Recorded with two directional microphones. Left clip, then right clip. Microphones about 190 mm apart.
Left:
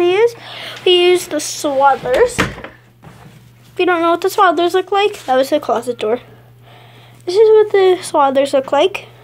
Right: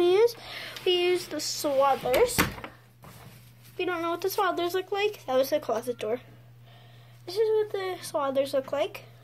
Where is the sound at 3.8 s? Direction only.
20° left (ahead or behind).